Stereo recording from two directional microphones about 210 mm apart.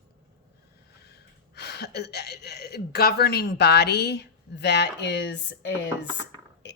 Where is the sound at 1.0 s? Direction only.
50° left (ahead or behind).